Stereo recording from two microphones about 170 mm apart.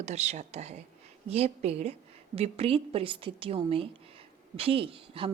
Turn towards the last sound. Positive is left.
turn(degrees=-30)  # may be behind; listen again after turning